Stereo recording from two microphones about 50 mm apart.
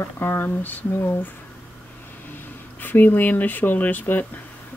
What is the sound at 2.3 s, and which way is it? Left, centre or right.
Speech, left.